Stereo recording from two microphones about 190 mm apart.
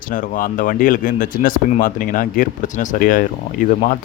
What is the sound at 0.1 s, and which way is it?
Speech, 45° left (ahead or behind).